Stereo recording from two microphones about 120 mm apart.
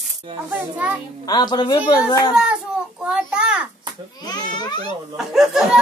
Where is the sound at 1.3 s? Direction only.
35° left (ahead or behind).